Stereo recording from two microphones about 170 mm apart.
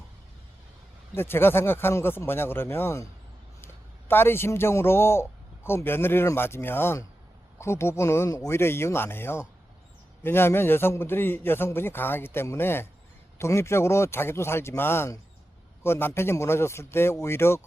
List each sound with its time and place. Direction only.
1.1 s a man's voice: 15° left (ahead or behind)
4.1 s a man's voice: 15° left (ahead or behind)